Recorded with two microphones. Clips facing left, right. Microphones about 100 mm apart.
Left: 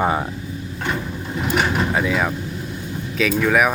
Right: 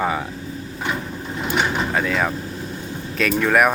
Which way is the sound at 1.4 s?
5° left (ahead or behind).